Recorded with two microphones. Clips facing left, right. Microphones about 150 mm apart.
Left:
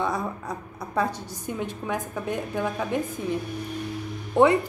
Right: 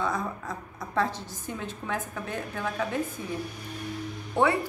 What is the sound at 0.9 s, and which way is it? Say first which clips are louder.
A woman's voice: left 2 dB; 15° left (ahead or behind).